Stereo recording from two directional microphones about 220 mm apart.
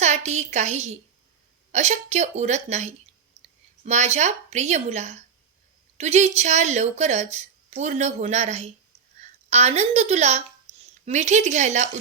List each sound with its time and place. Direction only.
0.0 s a woman's voice: 30° right (ahead or behind)